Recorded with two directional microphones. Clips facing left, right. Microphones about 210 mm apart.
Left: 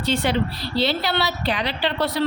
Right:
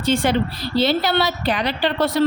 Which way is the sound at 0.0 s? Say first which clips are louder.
Right 3 dB; 50° right (ahead or behind).